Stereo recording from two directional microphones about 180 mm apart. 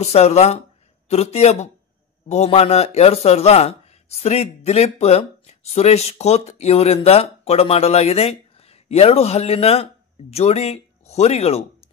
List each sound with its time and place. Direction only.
0.0 s speech: 35° left (ahead or behind)